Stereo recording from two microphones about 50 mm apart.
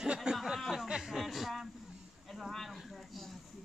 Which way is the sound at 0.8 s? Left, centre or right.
Centre.